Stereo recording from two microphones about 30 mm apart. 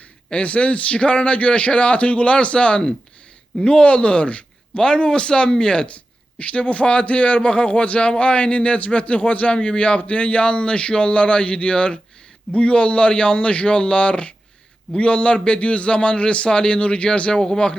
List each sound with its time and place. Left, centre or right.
0.3 s a man's voice: left
4.8 s a man's voice: left
6.4 s a man's voice: left
9.5 s a man's voice: left
17.3 s speech: left